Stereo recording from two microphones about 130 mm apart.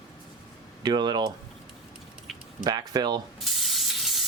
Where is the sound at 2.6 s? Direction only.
30° right (ahead or behind).